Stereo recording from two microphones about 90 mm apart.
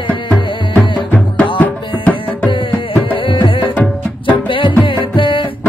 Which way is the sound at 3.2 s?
75° left (ahead or behind).